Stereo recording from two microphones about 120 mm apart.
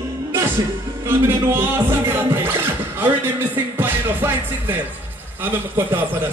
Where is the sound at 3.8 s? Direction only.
15° right (ahead or behind).